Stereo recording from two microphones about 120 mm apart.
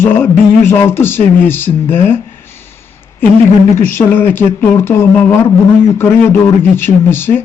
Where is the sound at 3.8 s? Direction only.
20° left (ahead or behind).